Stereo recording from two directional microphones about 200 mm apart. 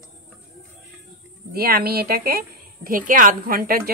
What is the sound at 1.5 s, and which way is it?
Speech, 50° right (ahead or behind).